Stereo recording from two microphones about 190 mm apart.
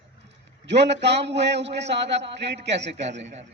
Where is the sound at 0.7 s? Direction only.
65° right (ahead or behind).